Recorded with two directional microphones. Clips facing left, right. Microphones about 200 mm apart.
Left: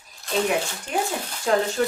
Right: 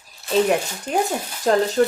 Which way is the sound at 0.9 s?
45° right (ahead or behind).